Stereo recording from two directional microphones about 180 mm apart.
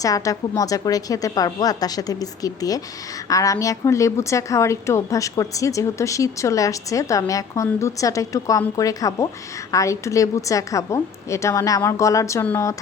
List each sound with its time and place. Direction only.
0.0 s a woman's voice: 20° left (ahead or behind)